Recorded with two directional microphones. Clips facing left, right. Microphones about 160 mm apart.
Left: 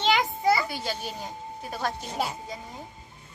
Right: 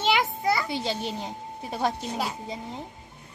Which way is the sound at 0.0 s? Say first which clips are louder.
Left 1 dB; centre (ahead or behind).